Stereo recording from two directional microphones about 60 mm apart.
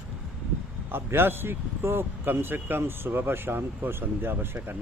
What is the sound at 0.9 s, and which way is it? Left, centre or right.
Speech, right.